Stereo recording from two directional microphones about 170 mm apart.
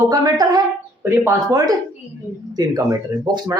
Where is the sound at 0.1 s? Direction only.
20° right (ahead or behind).